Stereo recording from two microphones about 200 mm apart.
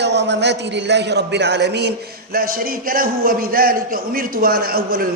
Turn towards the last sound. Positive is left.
turn(degrees=-50)  # may be behind; listen again after turning